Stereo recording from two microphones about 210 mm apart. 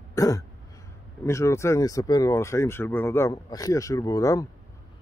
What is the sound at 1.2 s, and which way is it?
Speech, 15° left (ahead or behind).